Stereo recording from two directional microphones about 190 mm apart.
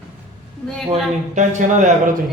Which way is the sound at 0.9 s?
40° right (ahead or behind).